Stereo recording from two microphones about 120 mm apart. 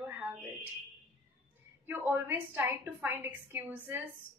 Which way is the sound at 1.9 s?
15° right (ahead or behind).